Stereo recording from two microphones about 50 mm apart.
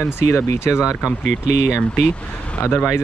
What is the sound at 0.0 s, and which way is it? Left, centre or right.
Speech, left.